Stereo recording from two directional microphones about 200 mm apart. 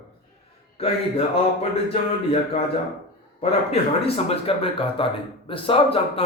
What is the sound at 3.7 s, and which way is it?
A man's voice, 30° left (ahead or behind).